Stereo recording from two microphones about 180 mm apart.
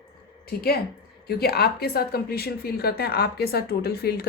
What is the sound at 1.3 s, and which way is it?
A woman's voice, 60° left (ahead or behind).